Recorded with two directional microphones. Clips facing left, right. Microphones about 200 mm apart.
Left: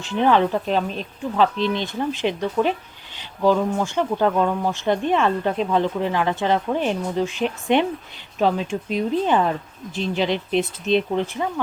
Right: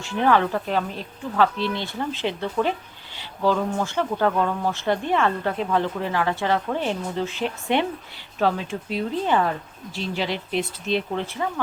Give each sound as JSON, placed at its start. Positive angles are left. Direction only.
{"t": 0.0, "sound": "speech", "side_deg": 20}